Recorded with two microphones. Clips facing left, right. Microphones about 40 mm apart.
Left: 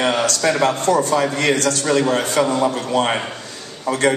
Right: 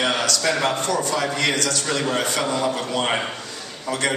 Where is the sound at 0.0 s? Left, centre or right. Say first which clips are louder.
Left 4 dB; left.